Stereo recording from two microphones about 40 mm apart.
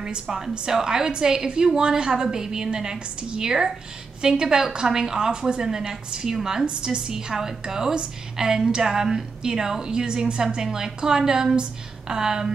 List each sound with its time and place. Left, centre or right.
0.0 s a woman's voice: centre